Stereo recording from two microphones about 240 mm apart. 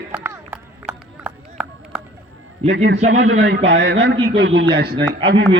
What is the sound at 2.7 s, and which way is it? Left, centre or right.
A man's voice, right.